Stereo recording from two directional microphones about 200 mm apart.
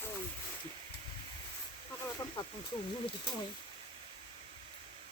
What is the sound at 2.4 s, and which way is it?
Snake, 20° left (ahead or behind).